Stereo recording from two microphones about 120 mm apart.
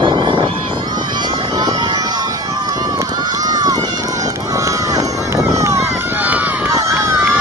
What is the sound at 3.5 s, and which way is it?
Run, 35° right (ahead or behind).